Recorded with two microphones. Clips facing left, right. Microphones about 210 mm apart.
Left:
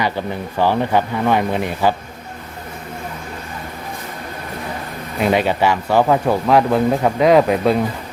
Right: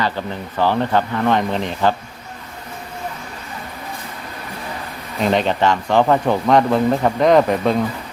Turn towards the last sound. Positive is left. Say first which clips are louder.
# left 1 dB
turn(degrees=5)  # may be behind; listen again after turning